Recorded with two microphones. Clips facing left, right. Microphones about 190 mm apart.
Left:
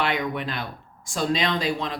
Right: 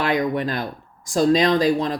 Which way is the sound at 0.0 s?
40° right (ahead or behind).